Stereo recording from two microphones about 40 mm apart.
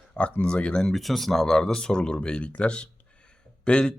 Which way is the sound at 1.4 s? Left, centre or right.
Centre.